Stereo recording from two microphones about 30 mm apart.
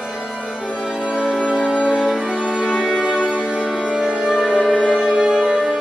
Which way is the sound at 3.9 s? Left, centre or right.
Right.